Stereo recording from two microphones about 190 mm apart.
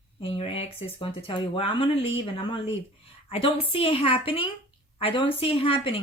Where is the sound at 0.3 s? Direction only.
30° left (ahead or behind).